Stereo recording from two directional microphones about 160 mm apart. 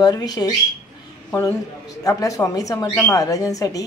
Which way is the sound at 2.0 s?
20° left (ahead or behind).